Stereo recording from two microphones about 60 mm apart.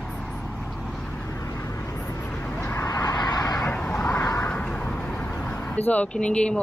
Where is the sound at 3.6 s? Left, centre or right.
Left.